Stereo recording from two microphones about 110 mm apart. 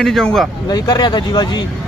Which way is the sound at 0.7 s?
40° left (ahead or behind).